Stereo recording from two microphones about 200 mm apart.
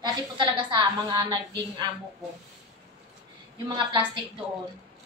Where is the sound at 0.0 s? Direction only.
25° right (ahead or behind).